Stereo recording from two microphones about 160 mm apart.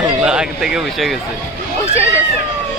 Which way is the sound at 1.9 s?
20° left (ahead or behind).